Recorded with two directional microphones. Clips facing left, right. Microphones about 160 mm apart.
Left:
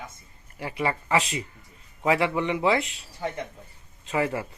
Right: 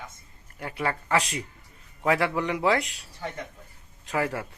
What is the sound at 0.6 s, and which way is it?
Speech, 5° left (ahead or behind).